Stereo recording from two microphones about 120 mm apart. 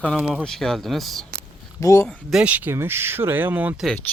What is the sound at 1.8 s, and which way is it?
Speech, 25° left (ahead or behind).